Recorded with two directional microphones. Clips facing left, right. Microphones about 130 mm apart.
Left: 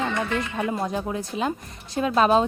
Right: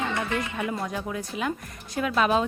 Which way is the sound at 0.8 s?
30° left (ahead or behind).